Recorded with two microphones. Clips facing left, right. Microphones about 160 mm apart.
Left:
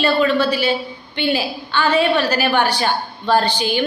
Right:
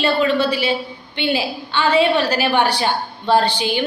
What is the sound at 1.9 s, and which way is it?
A woman's voice, 30° right (ahead or behind).